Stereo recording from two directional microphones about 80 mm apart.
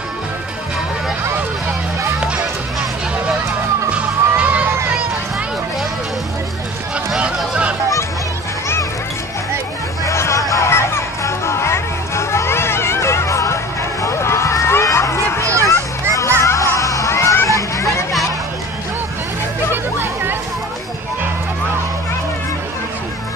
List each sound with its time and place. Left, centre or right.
2.1 s music: centre
4.4 s a sound: centre
4.6 s a sound: right
10.0 s a sound: left
10.5 s music: left
14.0 s run: left
15.6 s children playing: left
16.3 s music: left
19.7 s hubbub: right